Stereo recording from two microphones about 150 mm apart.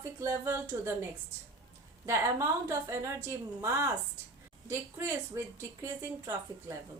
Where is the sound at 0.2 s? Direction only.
20° right (ahead or behind).